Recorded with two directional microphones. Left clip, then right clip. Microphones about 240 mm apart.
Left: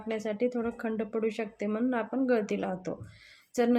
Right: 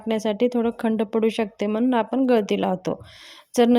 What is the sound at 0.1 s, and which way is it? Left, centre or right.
A woman's voice, right.